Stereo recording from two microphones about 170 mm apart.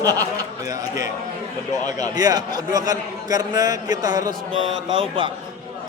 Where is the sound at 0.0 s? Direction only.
20° right (ahead or behind).